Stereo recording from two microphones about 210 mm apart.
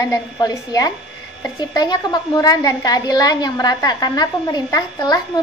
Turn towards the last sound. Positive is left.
turn(degrees=20)  # may be behind; listen again after turning